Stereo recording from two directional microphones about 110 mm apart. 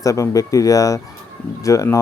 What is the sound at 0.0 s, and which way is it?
Speech, 30° left (ahead or behind).